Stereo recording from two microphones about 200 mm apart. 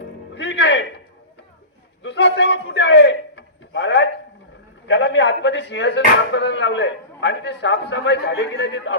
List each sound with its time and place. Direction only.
0.3 s music: 60° left (ahead or behind)
2.0 s a sound: 60° left (ahead or behind)
4.9 s speech: 60° left (ahead or behind)